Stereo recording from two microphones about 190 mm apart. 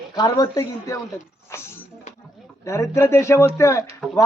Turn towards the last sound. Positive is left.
turn(degrees=15)  # may be behind; listen again after turning